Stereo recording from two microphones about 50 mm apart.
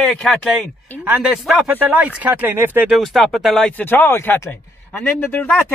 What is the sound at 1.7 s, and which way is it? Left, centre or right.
Speech, right.